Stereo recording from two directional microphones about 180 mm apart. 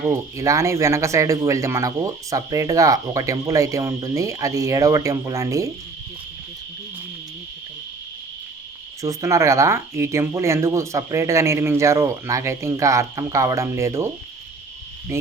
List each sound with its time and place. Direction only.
0.1 s speech: 15° right (ahead or behind)
9.0 s speech: 15° right (ahead or behind)
15.1 s speech: 15° right (ahead or behind)